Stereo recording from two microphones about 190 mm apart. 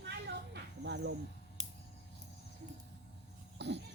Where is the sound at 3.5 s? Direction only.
65° right (ahead or behind).